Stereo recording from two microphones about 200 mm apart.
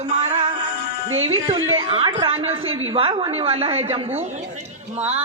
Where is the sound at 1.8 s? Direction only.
25° right (ahead or behind).